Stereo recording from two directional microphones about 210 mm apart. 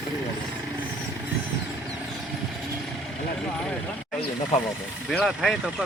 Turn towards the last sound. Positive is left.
turn(degrees=0)  # may be behind; listen again after turning